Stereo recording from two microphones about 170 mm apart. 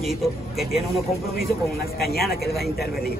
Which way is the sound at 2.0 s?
65° left (ahead or behind).